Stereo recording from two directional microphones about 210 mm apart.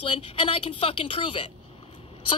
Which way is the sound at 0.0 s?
25° left (ahead or behind).